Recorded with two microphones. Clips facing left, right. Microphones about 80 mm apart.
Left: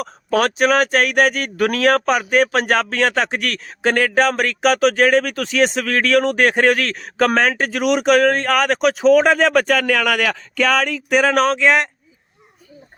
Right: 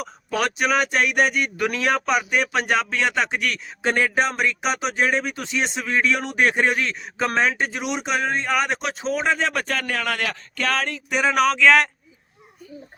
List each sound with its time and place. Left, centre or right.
0.0 s speech: left
11.4 s speech: left